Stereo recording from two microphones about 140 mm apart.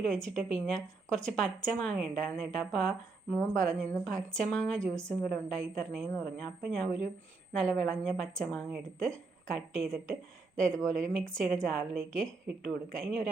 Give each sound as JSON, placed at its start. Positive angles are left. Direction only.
{"t": 0.1, "sound": "a woman's voice", "side_deg": 5}